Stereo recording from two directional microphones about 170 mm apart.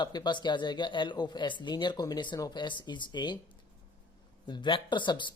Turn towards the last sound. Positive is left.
turn(degrees=30)  # may be behind; listen again after turning